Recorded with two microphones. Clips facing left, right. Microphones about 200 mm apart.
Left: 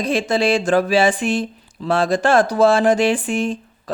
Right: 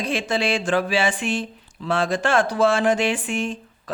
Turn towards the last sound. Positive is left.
turn(degrees=35)  # may be behind; listen again after turning